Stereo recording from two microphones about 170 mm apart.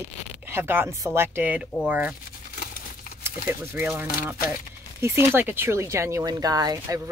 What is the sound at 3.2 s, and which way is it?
Speech, 10° right (ahead or behind).